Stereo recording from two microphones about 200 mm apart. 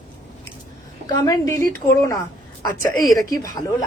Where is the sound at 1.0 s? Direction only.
20° left (ahead or behind).